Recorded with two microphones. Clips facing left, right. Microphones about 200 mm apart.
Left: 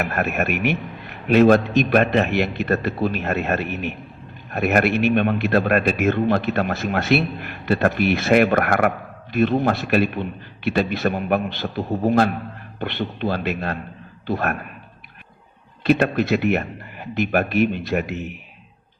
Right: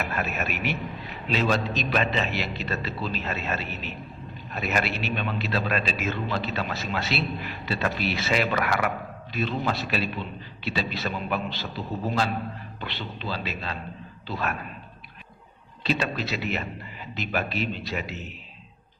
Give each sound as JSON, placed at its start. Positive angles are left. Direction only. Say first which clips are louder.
{"t": 0.0, "sound": "a man's voice", "louder": "left 7 dB", "side_deg": 55}
{"t": 15.8, "sound": "a man's voice", "louder": "left 9 dB", "side_deg": 55}